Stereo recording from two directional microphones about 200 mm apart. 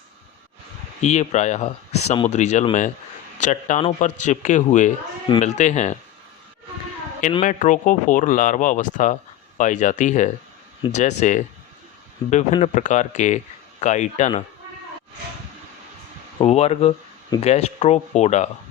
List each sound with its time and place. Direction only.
1.0 s speech: 35° left (ahead or behind)
7.4 s speech: 40° left (ahead or behind)
16.4 s speech: 30° left (ahead or behind)